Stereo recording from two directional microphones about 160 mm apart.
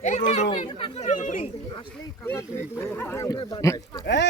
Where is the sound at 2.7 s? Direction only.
15° left (ahead or behind).